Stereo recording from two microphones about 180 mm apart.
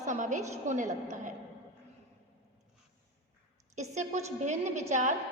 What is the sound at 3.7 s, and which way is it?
A woman's voice, 40° right (ahead or behind).